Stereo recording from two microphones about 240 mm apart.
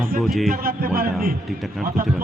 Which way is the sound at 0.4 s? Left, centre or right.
Right.